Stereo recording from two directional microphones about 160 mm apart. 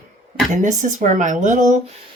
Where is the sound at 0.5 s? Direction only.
50° right (ahead or behind).